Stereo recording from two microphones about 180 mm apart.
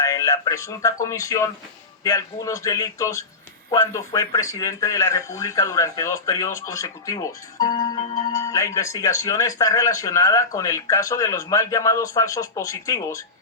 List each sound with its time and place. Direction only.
0.0 s speech: 15° left (ahead or behind)